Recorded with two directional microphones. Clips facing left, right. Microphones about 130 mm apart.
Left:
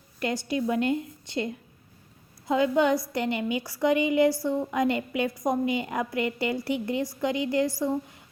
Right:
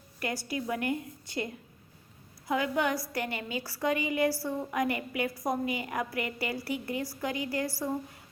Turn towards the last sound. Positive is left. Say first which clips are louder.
# left 7 dB
turn(degrees=20)  # may be behind; listen again after turning